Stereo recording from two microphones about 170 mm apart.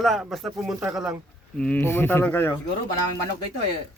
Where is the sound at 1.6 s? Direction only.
10° left (ahead or behind).